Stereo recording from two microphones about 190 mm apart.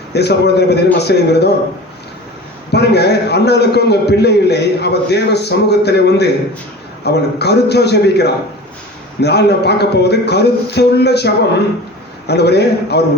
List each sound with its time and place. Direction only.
0.1 s a man's voice: 60° left (ahead or behind)
2.7 s a man's voice: 60° left (ahead or behind)
12.3 s a man's voice: 60° left (ahead or behind)